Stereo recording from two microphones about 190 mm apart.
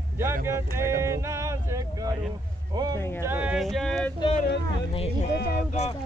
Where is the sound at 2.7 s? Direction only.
20° right (ahead or behind).